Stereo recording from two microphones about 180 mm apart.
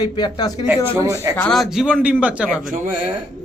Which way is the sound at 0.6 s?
15° right (ahead or behind).